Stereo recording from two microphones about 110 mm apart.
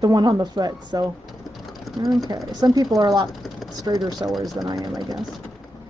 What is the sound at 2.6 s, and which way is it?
Speech, 35° right (ahead or behind).